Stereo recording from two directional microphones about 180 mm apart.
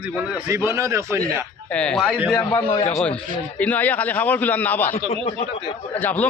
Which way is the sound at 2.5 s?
35° left (ahead or behind).